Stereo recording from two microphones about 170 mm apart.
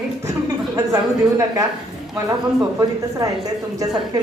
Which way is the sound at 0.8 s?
20° right (ahead or behind).